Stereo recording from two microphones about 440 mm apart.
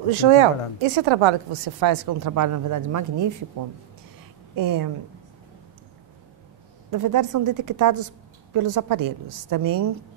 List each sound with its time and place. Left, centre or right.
0.1 s a woman's voice: right
4.6 s a woman's voice: right
6.9 s a woman's voice: right